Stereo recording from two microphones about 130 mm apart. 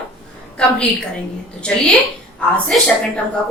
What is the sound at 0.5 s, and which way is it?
Speech, 5° left (ahead or behind).